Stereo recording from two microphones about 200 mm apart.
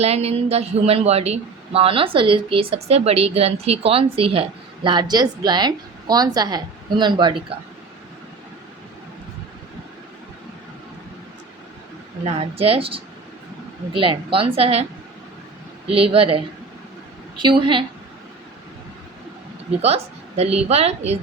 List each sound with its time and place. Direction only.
0.0 s speech: 30° right (ahead or behind)
12.2 s speech: 30° right (ahead or behind)
15.9 s speech: 30° right (ahead or behind)
19.8 s a woman's voice: 30° right (ahead or behind)